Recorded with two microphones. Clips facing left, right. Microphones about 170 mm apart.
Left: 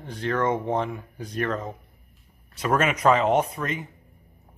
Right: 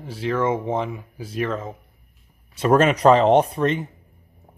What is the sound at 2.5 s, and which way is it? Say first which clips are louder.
Speech: right 7 dB; 30° right (ahead or behind).